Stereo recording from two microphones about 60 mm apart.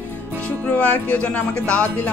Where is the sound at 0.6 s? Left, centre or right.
Left.